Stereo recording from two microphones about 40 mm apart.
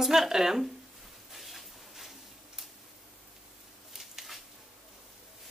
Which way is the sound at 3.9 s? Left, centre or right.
Centre.